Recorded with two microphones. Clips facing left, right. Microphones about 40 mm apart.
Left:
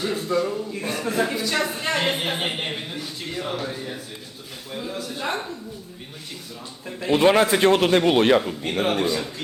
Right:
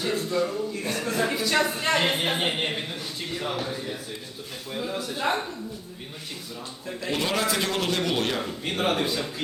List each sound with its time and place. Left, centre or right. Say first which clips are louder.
0.1 s speech: even; centre
1.3 s a man's voice: even; centre
4.7 s a man's voice: even; centre
7.0 s a man's voice: left 9 dB; left
8.6 s a man's voice: left 3 dB; centre